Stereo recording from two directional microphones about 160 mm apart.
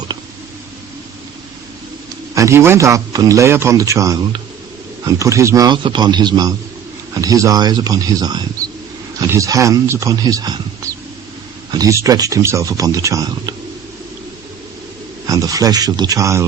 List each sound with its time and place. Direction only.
2.3 s a man's voice: 20° right (ahead or behind)
15.3 s a man's voice: 20° right (ahead or behind)